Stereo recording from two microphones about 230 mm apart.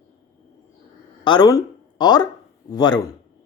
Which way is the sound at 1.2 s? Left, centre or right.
Centre.